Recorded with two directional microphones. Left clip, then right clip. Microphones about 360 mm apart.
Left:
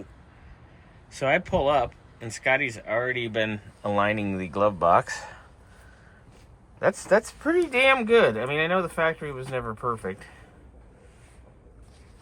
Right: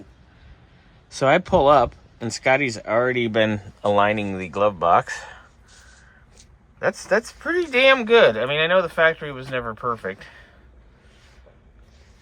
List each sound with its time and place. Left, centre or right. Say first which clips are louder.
1.1 s speech: right 6 dB; centre
3.8 s speech: right 6 dB; centre
6.7 s speech: right 1 dB; centre